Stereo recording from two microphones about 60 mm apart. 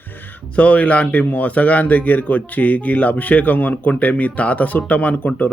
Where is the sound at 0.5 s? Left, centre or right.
Left.